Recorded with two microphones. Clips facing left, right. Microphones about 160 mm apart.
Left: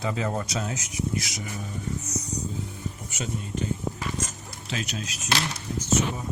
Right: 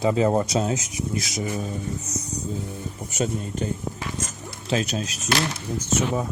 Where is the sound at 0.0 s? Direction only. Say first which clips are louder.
Right 8 dB; 30° right (ahead or behind).